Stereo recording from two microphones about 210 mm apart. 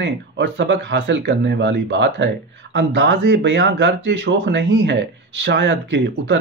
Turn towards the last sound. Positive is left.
turn(degrees=-60)  # may be behind; listen again after turning